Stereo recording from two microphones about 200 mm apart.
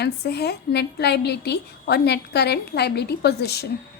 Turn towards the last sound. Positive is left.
turn(degrees=55)  # may be behind; listen again after turning